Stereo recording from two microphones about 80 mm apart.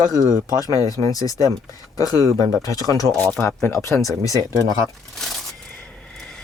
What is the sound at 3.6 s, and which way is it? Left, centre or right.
Speech, left.